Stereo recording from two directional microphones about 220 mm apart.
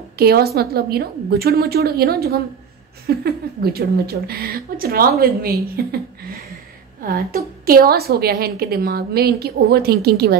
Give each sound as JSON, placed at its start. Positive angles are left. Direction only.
{"t": 0.2, "sound": "a woman's voice", "side_deg": -45}